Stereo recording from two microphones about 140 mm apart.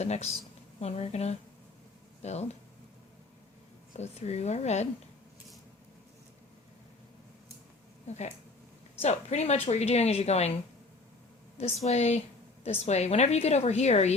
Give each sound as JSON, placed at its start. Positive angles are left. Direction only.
{"t": 0.0, "sound": "a woman's voice", "side_deg": 50}
{"t": 3.9, "sound": "a woman's voice", "side_deg": 50}
{"t": 8.0, "sound": "a woman's voice", "side_deg": 55}